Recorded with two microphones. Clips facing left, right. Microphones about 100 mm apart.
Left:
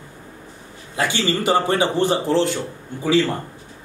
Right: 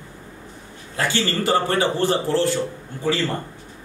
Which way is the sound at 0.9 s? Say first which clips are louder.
Left 1 dB; 15° left (ahead or behind).